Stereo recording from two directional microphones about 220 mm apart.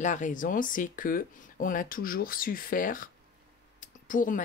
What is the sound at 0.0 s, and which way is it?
Speech, 35° left (ahead or behind).